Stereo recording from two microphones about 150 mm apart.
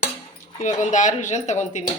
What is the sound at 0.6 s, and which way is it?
Speech, 55° left (ahead or behind).